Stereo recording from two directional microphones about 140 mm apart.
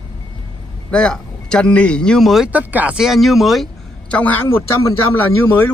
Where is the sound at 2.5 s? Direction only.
10° right (ahead or behind); by 4.6 s 10° left (ahead or behind).